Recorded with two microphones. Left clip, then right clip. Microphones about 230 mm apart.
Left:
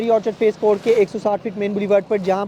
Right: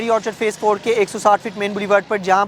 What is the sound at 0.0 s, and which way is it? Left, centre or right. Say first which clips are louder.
Speech: left 1 dB; right.